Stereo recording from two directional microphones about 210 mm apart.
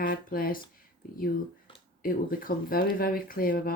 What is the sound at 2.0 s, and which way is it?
Speech, 40° left (ahead or behind).